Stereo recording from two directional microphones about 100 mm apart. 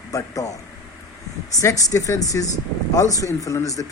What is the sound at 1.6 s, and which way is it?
Speech, 35° left (ahead or behind).